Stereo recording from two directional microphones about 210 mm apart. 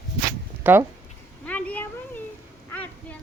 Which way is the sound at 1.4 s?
5° left (ahead or behind).